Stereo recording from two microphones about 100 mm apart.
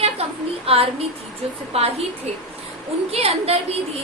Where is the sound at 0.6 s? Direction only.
75° right (ahead or behind).